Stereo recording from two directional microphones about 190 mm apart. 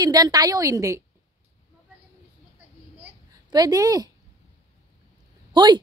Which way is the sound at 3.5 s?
20° right (ahead or behind).